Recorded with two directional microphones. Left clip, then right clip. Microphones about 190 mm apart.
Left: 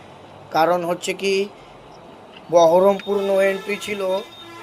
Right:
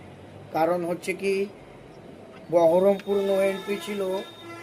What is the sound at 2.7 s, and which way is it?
Speech, 20° left (ahead or behind).